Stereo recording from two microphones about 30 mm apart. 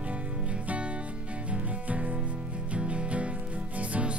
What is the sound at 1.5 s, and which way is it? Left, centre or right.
Music, right.